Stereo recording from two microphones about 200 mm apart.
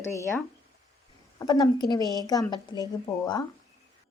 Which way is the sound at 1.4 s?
20° left (ahead or behind).